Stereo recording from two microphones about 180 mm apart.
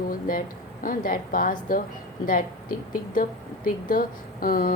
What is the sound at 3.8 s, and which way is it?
Speech, 50° left (ahead or behind).